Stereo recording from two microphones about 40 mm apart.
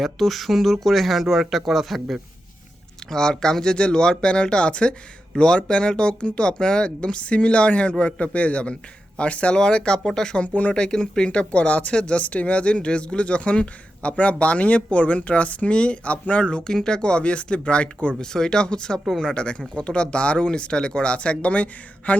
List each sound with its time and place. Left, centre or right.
0.0 s speech: centre
3.1 s speech: centre; by 9.6 s left
9.6 s speech: left
10.5 s speech: left
10.8 s speech: left
11.3 s speech: left
18.1 s speech: centre; by 22.2 s left